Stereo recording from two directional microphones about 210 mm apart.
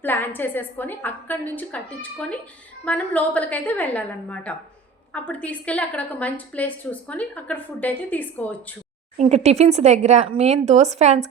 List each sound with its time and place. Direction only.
0.0 s a woman's voice: 10° left (ahead or behind)
9.1 s speech: 30° right (ahead or behind)